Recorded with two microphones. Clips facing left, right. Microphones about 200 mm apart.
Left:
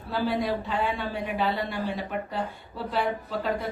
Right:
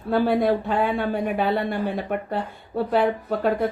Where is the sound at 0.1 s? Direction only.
55° right (ahead or behind).